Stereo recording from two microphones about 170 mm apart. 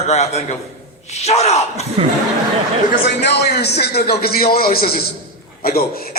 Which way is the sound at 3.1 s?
85° left.